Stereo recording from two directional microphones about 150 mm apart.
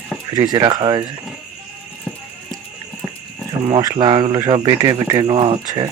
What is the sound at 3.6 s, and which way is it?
Speech, 25° right (ahead or behind).